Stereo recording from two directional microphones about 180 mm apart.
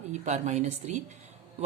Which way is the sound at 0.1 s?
40° right (ahead or behind).